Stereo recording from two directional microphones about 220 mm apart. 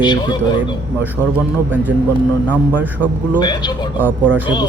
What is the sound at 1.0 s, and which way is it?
A man's voice, 10° right (ahead or behind).